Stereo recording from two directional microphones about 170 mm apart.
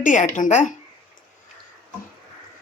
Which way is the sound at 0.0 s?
50° left (ahead or behind).